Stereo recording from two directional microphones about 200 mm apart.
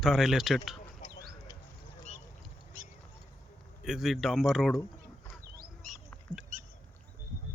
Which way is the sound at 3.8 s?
Centre (ahead or behind).